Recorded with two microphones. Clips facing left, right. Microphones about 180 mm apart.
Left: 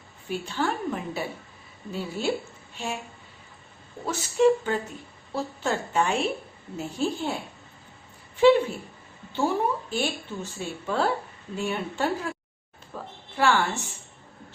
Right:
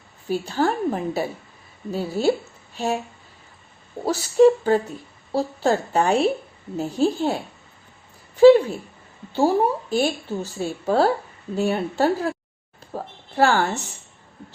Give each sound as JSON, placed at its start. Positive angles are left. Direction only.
{"t": 0.3, "sound": "speech", "side_deg": -40}
{"t": 4.0, "sound": "speech", "side_deg": -35}
{"t": 9.3, "sound": "speech", "side_deg": -35}
{"t": 12.9, "sound": "a sound", "side_deg": -40}